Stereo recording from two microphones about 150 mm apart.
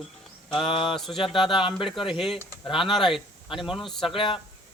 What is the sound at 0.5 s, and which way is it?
Speech, 35° left (ahead or behind).